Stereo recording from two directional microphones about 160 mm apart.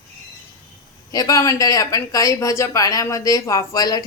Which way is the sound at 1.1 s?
20° left (ahead or behind).